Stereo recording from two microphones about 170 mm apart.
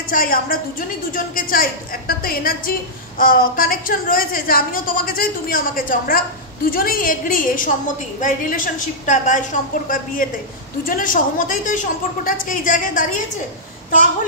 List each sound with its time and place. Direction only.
0.1 s a woman's voice: 55° left (ahead or behind)